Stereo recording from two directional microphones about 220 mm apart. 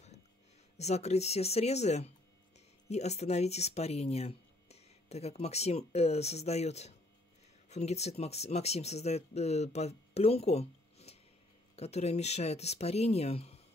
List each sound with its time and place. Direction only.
0.7 s speech: 30° left (ahead or behind)